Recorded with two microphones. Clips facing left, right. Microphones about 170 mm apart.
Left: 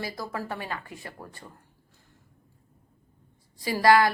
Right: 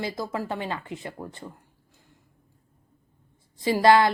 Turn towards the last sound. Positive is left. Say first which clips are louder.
# right 2 dB
turn(degrees=-25)  # may be behind; listen again after turning